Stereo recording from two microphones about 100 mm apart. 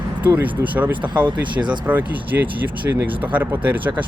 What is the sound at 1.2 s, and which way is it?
Speech, 50° right (ahead or behind).